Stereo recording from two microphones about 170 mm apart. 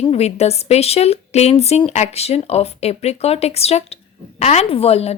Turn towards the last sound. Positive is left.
turn(degrees=35)  # may be behind; listen again after turning